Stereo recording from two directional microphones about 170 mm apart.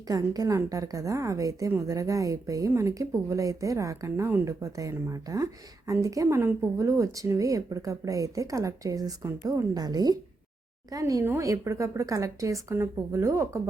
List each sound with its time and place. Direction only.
0.1 s a woman's voice: 20° right (ahead or behind)